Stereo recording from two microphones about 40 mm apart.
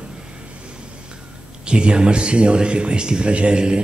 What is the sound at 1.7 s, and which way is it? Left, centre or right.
Speech, right.